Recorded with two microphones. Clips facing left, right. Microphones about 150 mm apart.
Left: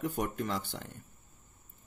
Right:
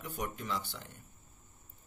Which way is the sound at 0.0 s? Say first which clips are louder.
Left 7 dB; 50° left (ahead or behind).